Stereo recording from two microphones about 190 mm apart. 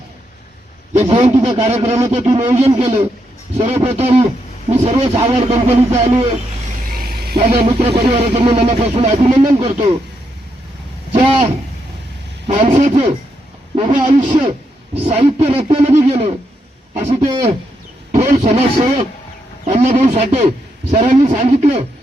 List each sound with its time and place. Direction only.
1.0 s a man's voice: 30° right (ahead or behind)
6.9 s vehicle: 50° right (ahead or behind)
7.3 s speech: 25° right (ahead or behind)
11.1 s speech: 30° right (ahead or behind)
12.5 s a man's voice: 35° right (ahead or behind)
19.6 s a man's voice: 35° right (ahead or behind)